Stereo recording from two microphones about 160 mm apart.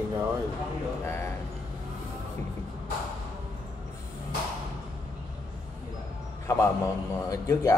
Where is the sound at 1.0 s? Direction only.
15° left (ahead or behind).